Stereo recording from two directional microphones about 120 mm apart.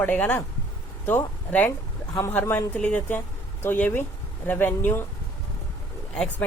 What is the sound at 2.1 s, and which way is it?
Speech, 30° left (ahead or behind).